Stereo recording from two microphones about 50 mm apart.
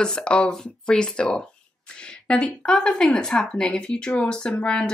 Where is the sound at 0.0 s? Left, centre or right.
Centre.